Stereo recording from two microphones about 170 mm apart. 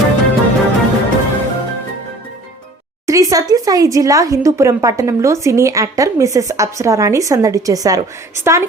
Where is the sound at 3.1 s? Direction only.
20° right (ahead or behind).